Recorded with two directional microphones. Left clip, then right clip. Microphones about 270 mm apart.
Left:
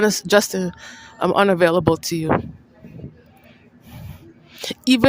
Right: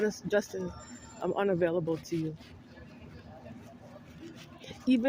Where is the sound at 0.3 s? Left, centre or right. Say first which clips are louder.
Left 14 dB; left.